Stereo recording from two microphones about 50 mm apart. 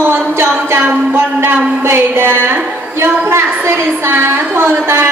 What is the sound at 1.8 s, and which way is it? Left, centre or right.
A woman's voice, right.